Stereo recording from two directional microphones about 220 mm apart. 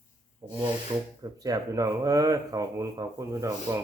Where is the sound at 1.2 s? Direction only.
15° right (ahead or behind).